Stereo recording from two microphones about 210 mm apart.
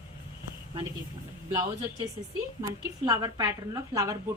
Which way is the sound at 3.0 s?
15° right (ahead or behind).